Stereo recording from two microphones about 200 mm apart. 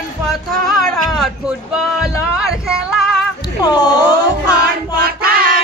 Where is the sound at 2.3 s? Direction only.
Centre (ahead or behind).